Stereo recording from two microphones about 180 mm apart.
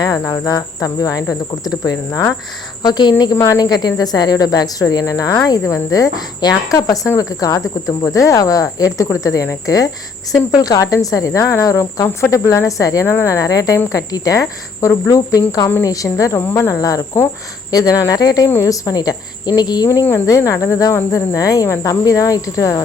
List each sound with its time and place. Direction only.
0.0 s speech: 20° left (ahead or behind)